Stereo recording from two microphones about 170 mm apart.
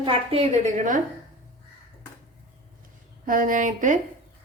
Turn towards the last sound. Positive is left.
turn(degrees=-50)  # may be behind; listen again after turning